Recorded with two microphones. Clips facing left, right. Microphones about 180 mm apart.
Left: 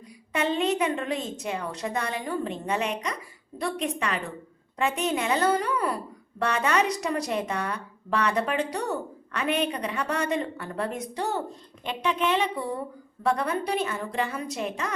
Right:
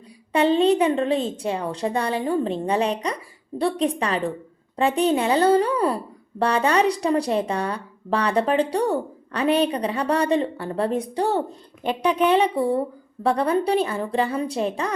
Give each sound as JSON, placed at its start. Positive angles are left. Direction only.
{"t": 0.3, "sound": "speech", "side_deg": -30}